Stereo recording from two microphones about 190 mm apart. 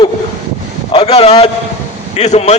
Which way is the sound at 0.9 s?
30° left (ahead or behind).